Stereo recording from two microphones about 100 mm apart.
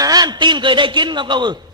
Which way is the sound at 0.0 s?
40° right (ahead or behind).